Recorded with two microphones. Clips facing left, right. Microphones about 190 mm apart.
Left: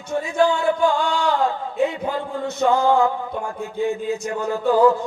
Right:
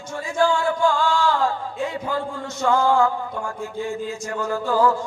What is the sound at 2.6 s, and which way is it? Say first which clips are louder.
Chant: left 1 dB; 20° left (ahead or behind).